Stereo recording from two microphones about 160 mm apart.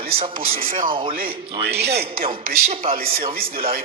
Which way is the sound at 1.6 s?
90° right.